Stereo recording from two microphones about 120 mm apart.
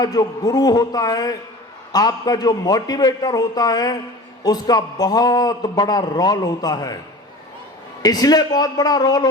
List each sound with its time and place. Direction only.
0.0 s a man's voice: 30° left (ahead or behind)
8.0 s a man's voice: 35° left (ahead or behind)